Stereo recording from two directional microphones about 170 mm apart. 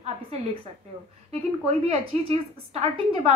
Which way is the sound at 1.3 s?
40° right (ahead or behind).